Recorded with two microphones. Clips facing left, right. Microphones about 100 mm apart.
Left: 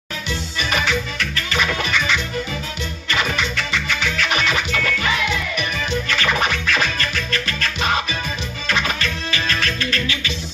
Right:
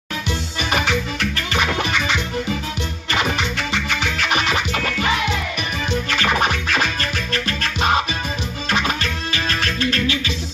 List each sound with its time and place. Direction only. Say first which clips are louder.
0.6 s music: right 1 dB; 55° right (ahead or behind)
3.3 s music: even; 50° right (ahead or behind)